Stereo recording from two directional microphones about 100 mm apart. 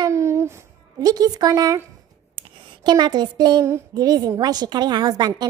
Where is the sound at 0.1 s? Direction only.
30° right (ahead or behind).